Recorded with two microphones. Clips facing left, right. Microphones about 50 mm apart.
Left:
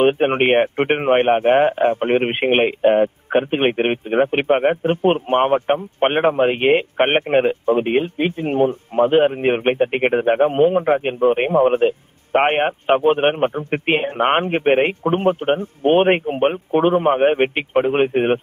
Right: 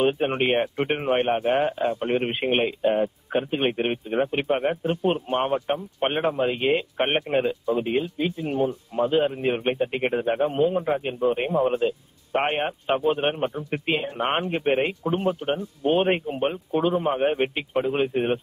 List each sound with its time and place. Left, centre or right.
0.0 s a man's voice: left